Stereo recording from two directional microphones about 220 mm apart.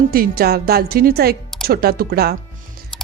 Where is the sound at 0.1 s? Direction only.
45° right (ahead or behind).